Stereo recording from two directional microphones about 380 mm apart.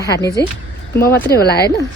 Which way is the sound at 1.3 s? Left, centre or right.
Left.